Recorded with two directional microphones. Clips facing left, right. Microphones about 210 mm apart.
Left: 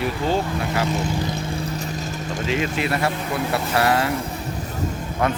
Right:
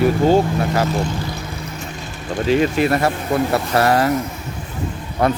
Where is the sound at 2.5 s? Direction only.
45° right (ahead or behind).